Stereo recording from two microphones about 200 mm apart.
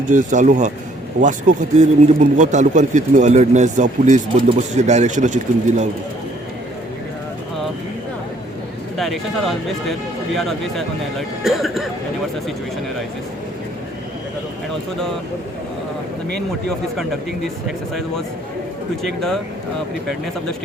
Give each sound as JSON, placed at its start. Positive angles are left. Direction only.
{"t": 0.1, "sound": "speech", "side_deg": -40}
{"t": 9.0, "sound": "speech", "side_deg": 0}
{"t": 16.6, "sound": "speech", "side_deg": 0}
{"t": 19.0, "sound": "speech", "side_deg": 0}